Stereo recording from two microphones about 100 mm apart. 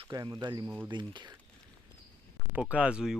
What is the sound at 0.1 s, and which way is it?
Speech, 40° right (ahead or behind).